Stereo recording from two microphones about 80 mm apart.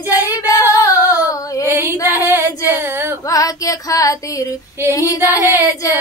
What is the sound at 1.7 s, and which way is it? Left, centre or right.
Music, right.